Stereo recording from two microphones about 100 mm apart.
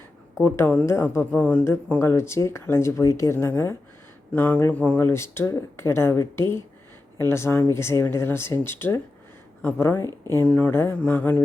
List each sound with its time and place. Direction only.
0.4 s speech: 20° left (ahead or behind)
1.3 s speech: 15° left (ahead or behind)
5.0 s speech: 25° left (ahead or behind)
10.4 s speech: 15° left (ahead or behind)